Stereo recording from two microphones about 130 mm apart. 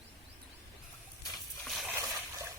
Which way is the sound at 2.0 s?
25° right (ahead or behind).